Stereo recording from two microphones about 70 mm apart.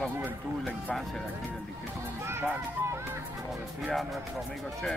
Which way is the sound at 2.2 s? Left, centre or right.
Right.